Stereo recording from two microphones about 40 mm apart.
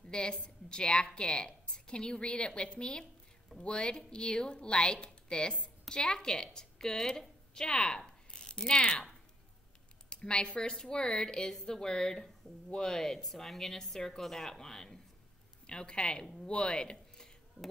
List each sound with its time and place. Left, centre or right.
0.1 s a woman's voice: left
8.3 s mechanisms: centre
10.0 s a woman's voice: left
13.2 s a woman's voice: centre
17.6 s speech: left